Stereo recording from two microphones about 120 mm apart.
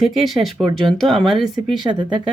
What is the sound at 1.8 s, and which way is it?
Speech, 40° right (ahead or behind).